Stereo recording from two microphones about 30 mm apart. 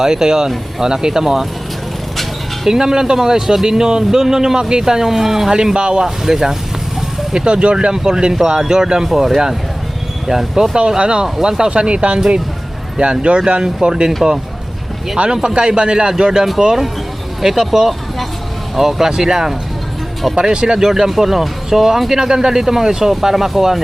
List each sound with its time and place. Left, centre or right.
0.0 s speech: right
2.6 s speech: centre
5.5 s speech: right
6.2 s speech: centre
7.3 s speech: right
7.9 s speech: right
9.1 s speech: centre
10.8 s speech: right
11.7 s speech: right
15.4 s speech: right
17.4 s speech: centre
20.3 s speech: right
20.7 s speech: centre